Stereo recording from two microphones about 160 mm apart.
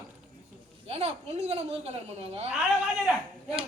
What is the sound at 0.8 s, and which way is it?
A woman's voice, 40° right (ahead or behind).